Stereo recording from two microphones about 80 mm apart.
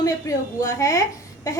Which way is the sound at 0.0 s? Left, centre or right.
Left.